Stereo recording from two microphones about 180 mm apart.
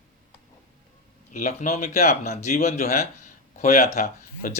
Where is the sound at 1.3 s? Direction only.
45° left (ahead or behind).